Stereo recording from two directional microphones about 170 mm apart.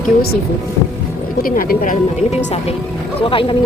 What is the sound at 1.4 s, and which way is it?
Speech, 55° left (ahead or behind).